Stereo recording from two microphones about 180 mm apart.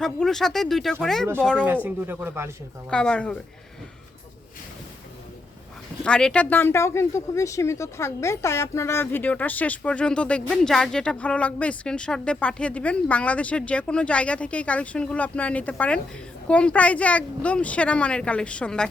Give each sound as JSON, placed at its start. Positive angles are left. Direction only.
{"t": 0.0, "sound": "speech", "side_deg": 0}
{"t": 1.6, "sound": "speech", "side_deg": -10}
{"t": 2.9, "sound": "speech", "side_deg": 5}
{"t": 6.0, "sound": "speech", "side_deg": 5}